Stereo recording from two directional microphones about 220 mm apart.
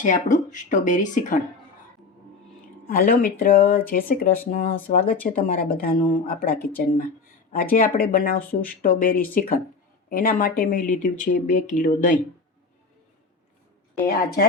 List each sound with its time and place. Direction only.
0.0 s speech: 35° left (ahead or behind)
2.8 s speech: 40° left (ahead or behind)